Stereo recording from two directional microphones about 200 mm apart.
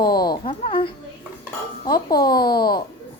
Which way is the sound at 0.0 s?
20° left (ahead or behind).